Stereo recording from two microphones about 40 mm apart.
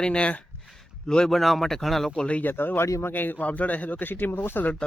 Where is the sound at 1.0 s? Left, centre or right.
Centre.